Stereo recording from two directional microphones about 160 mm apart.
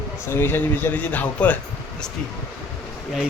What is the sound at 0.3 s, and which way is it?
A man's voice, 15° left (ahead or behind).